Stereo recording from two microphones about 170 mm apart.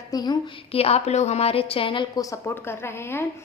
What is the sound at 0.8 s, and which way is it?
A woman's voice, 35° left (ahead or behind).